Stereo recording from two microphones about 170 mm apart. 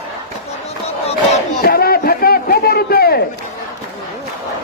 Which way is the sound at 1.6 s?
65° left (ahead or behind).